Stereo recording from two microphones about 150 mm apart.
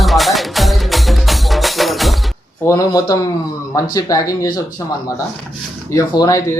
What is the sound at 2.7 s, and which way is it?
Speech, 25° left (ahead or behind).